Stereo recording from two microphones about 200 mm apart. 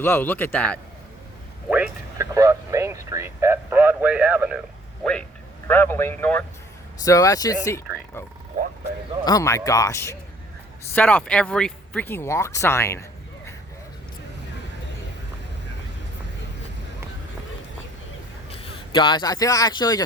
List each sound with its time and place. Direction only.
0.0 s speech: 10° left (ahead or behind)
1.7 s speech: 10° right (ahead or behind)
5.6 s speech: 10° left (ahead or behind)
9.2 s speech: 15° left (ahead or behind)
18.5 s speech: 25° left (ahead or behind)